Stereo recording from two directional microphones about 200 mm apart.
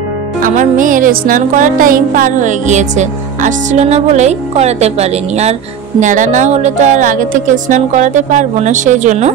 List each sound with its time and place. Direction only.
0.4 s music: 40° right (ahead or behind)